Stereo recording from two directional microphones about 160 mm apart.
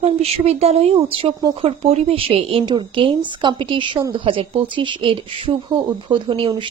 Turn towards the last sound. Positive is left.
turn(degrees=-30)  # may be behind; listen again after turning